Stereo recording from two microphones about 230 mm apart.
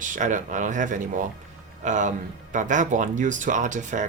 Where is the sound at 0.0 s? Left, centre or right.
Right.